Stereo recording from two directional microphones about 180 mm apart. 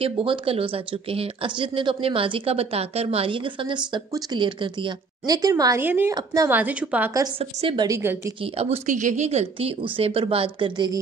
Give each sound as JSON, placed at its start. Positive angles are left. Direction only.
{"t": 0.0, "sound": "a woman's voice", "side_deg": -30}
{"t": 7.3, "sound": "speech", "side_deg": -30}
{"t": 8.5, "sound": "speech", "side_deg": -40}